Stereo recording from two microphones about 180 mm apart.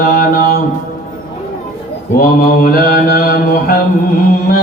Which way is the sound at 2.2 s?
55° left (ahead or behind).